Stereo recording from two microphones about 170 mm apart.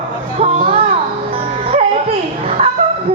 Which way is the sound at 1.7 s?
35° right (ahead or behind).